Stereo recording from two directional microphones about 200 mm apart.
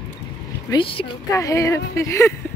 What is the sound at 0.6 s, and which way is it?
Speech, 25° left (ahead or behind).